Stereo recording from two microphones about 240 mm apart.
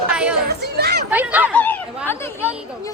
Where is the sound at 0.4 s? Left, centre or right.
Right.